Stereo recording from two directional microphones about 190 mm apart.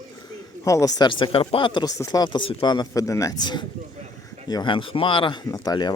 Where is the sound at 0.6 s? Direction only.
15° left (ahead or behind).